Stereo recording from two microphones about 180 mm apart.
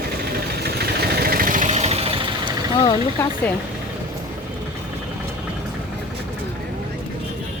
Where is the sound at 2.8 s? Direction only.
15° left (ahead or behind).